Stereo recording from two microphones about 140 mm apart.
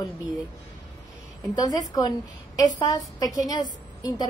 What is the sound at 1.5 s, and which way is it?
A woman's voice, 25° left (ahead or behind).